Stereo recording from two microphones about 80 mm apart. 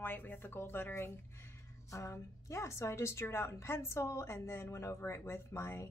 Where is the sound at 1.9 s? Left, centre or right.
Left.